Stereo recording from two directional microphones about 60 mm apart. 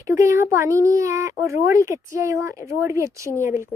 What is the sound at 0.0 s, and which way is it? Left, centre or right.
A child's voice, right.